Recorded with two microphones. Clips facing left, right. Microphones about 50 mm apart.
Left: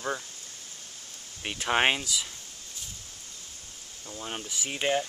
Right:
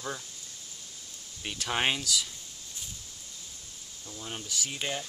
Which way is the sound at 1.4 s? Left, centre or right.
Left.